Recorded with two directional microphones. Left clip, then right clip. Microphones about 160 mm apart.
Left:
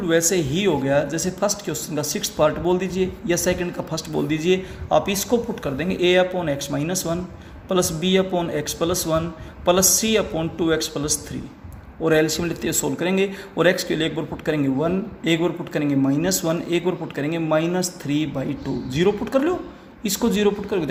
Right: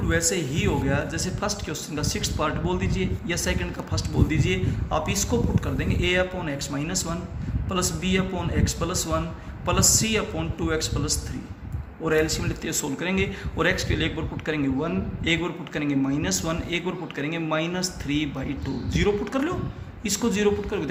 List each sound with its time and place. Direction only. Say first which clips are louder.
0.1 s speech: left 6 dB; 40° left (ahead or behind)